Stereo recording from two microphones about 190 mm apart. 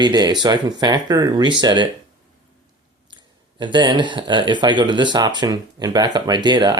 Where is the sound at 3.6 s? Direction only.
25° right (ahead or behind).